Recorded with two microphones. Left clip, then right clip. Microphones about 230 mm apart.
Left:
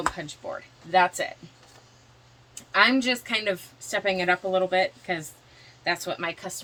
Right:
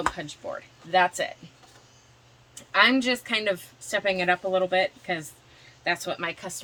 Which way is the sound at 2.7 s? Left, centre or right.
Right.